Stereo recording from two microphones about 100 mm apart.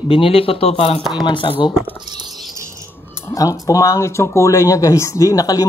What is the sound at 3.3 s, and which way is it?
Speech, 35° left (ahead or behind).